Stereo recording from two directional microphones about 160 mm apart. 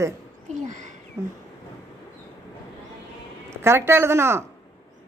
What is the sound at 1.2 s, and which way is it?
Speech, 15° right (ahead or behind).